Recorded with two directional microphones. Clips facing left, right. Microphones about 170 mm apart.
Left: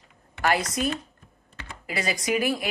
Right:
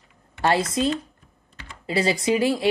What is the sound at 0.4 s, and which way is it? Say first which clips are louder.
Speech: right 3 dB; 25° right (ahead or behind).